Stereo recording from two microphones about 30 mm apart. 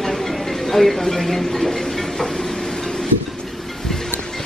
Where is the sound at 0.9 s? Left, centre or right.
Centre.